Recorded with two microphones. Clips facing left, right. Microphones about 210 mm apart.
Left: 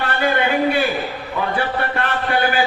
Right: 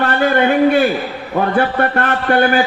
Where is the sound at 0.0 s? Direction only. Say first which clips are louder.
Right 5 dB; 45° right (ahead or behind).